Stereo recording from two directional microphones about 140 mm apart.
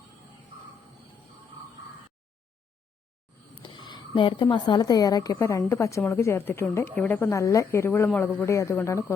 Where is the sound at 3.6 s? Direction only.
35° left (ahead or behind).